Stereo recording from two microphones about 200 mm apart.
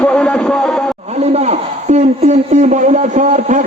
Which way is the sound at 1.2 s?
35° right (ahead or behind).